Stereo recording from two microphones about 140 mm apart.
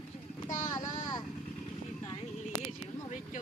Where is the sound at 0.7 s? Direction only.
30° left (ahead or behind).